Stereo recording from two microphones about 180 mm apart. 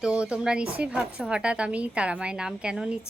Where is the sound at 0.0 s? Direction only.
5° right (ahead or behind).